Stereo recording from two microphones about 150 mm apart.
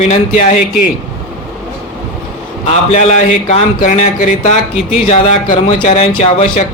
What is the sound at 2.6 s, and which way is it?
Speech, 45° left (ahead or behind).